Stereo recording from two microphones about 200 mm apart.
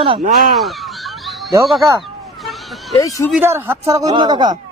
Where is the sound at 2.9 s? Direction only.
15° left (ahead or behind).